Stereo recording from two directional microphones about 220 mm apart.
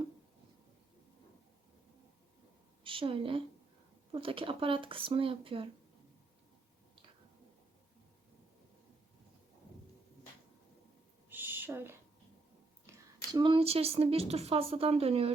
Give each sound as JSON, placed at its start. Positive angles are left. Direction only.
{"t": 2.8, "sound": "a woman's voice", "side_deg": -25}
{"t": 11.3, "sound": "owl", "side_deg": -10}
{"t": 12.9, "sound": "a sound", "side_deg": -10}
{"t": 13.3, "sound": "speech", "side_deg": -20}